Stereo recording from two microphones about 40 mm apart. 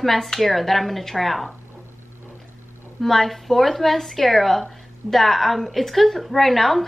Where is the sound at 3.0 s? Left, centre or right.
Centre.